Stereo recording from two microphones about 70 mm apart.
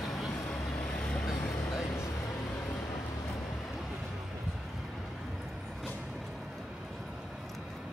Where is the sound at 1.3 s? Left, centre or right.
Centre.